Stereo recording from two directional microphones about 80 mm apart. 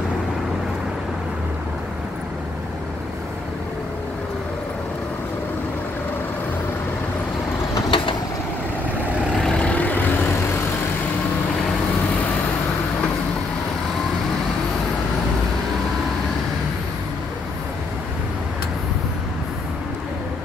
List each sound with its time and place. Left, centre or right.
7.9 s vehicle: left
9.4 s vehicle: centre